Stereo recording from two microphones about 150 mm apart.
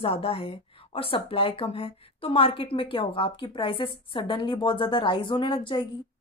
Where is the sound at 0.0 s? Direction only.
40° left (ahead or behind).